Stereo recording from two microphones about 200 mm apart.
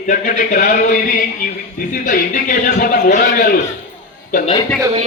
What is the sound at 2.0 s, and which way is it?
A man's voice, 40° left (ahead or behind).